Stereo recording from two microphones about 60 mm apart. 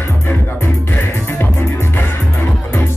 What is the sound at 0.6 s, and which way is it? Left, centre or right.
Music, left.